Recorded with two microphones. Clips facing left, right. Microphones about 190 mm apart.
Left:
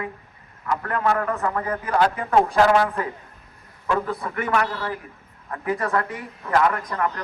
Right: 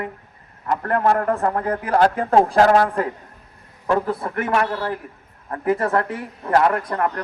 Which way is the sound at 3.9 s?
30° right (ahead or behind).